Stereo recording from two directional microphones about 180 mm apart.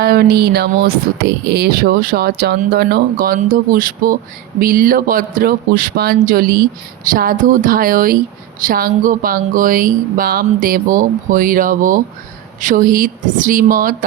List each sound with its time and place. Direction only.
0.0 s a man's voice: 60° right (ahead or behind)